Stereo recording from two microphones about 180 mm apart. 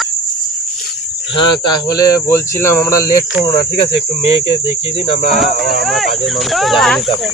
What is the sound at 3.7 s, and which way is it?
Speech, 35° left (ahead or behind).